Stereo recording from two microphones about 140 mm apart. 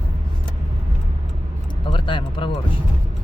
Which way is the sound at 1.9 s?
35° left (ahead or behind).